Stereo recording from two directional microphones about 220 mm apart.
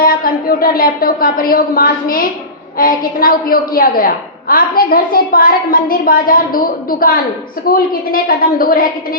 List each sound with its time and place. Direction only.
0.0 s a woman's voice: 40° left (ahead or behind)
7.7 s a woman's voice: 40° left (ahead or behind)